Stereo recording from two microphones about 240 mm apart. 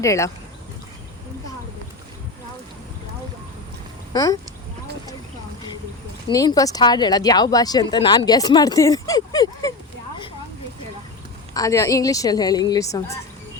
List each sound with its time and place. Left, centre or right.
0.0 s a woman's voice: centre
4.1 s speech: centre
6.2 s a woman's voice: centre
11.5 s a woman's voice: centre